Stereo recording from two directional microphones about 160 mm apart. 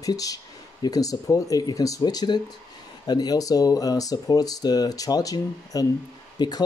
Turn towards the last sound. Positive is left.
turn(degrees=25)  # may be behind; listen again after turning